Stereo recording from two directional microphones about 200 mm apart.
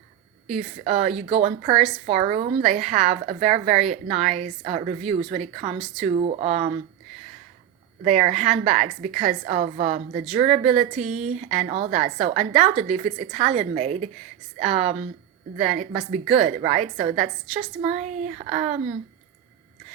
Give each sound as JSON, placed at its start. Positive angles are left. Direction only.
{"t": 0.9, "sound": "a woman's voice", "side_deg": -30}
{"t": 8.0, "sound": "a woman's voice", "side_deg": -35}
{"t": 11.0, "sound": "speech", "side_deg": -5}
{"t": 11.3, "sound": "a woman's voice", "side_deg": -35}